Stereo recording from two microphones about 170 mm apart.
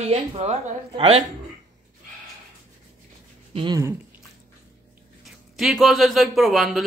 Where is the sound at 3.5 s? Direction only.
30° right (ahead or behind).